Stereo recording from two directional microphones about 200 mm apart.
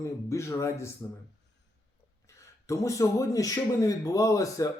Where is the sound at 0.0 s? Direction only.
15° left (ahead or behind).